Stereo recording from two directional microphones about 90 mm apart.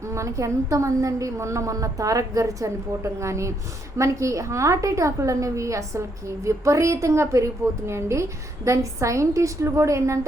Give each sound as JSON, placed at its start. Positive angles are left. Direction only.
{"t": 0.0, "sound": "a woman's voice", "side_deg": -35}